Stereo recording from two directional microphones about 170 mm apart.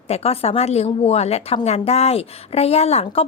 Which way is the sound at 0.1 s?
35° left (ahead or behind).